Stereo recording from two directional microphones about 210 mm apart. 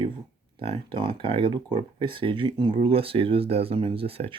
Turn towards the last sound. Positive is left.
turn(degrees=-25)  # may be behind; listen again after turning